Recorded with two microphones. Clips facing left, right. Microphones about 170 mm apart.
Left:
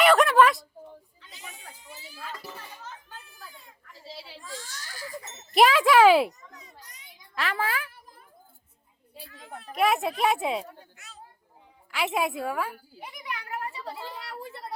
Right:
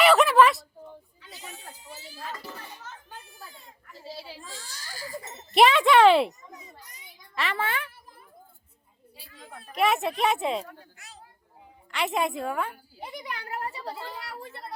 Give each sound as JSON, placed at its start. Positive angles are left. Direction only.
{"t": 0.0, "sound": "a sound", "side_deg": 0}
{"t": 4.2, "sound": "baby cry", "side_deg": 0}
{"t": 5.5, "sound": "a child's voice", "side_deg": 0}
{"t": 7.3, "sound": "speech", "side_deg": 0}
{"t": 9.7, "sound": "speech", "side_deg": 0}
{"t": 11.9, "sound": "speech", "side_deg": 5}
{"t": 13.0, "sound": "a child's voice", "side_deg": -35}
{"t": 13.9, "sound": "speech", "side_deg": 0}